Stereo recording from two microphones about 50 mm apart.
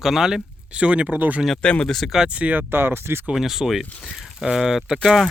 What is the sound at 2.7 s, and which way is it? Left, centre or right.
Speech, right.